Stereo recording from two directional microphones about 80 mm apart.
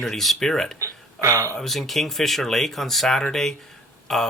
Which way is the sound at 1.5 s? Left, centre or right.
Centre.